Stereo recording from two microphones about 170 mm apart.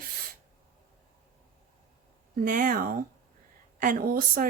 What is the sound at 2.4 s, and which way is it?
Speech, 55° right (ahead or behind).